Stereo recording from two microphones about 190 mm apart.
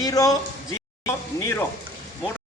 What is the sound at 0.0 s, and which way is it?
Speech, 20° left (ahead or behind).